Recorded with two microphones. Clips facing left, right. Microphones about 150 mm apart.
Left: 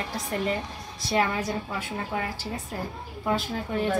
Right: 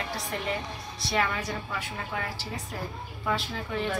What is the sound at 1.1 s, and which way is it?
Speech, 25° left (ahead or behind).